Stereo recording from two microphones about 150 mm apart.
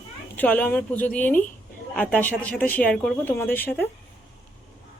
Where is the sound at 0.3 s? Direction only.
10° left (ahead or behind).